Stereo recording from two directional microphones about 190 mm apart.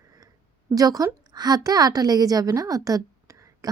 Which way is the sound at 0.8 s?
20° right (ahead or behind).